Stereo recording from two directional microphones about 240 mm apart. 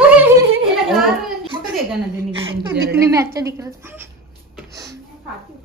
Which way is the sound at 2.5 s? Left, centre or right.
Right.